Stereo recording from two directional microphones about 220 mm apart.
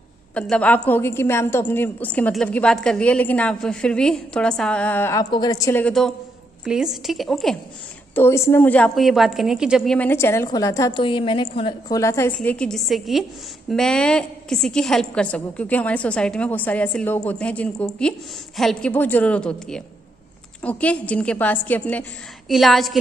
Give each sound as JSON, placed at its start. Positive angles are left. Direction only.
{"t": 0.3, "sound": "a woman's voice", "side_deg": 5}